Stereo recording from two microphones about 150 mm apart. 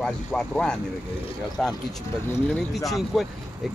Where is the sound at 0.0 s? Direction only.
5° left (ahead or behind).